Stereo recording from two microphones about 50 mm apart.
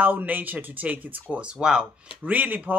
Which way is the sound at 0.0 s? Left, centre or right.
Right.